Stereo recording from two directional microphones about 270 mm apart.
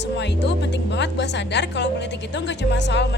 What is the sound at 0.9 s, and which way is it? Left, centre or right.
A woman's voice, left.